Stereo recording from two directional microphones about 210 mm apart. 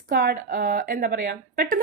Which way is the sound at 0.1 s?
45° right (ahead or behind).